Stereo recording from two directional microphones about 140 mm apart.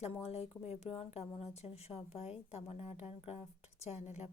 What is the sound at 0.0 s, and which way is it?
A woman's voice, 45° left (ahead or behind).